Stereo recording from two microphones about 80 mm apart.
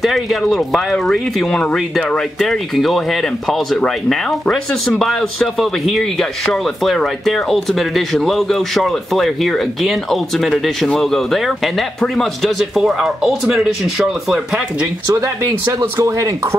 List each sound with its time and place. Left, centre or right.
0.0 s speech: centre
15.0 s speech: right